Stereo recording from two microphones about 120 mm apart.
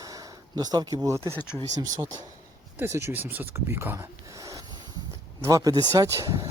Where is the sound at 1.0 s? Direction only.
25° right (ahead or behind).